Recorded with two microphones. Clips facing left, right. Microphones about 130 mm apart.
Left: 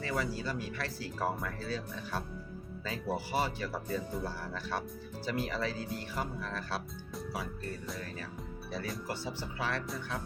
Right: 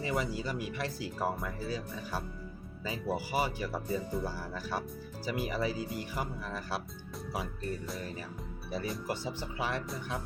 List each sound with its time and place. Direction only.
0.0 s speech: 15° right (ahead or behind)
7.9 s speech: 15° right (ahead or behind)